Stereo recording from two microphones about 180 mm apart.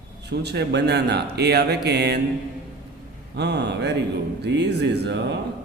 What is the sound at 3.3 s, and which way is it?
Speech, 65° right (ahead or behind).